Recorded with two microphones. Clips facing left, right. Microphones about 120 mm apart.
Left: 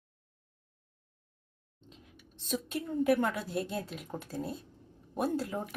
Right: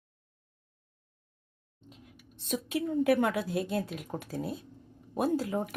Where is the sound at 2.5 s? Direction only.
5° right (ahead or behind).